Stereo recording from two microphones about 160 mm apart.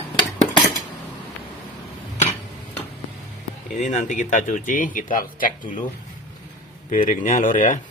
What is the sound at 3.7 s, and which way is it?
Speech, 50° left (ahead or behind).